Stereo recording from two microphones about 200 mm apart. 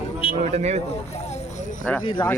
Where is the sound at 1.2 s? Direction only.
35° left (ahead or behind).